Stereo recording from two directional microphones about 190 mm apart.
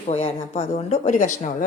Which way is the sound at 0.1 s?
35° left (ahead or behind).